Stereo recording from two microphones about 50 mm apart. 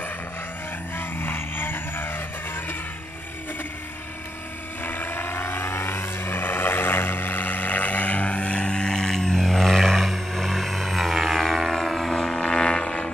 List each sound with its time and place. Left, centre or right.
0.9 s vehicle: left
4.8 s vehicle: left; by 11.1 s centre
11.3 s civil defense siren: centre